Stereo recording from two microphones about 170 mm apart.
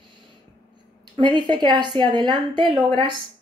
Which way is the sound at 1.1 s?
25° right (ahead or behind).